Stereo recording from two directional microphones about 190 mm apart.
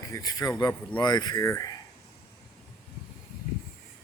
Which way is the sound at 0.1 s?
20° left (ahead or behind).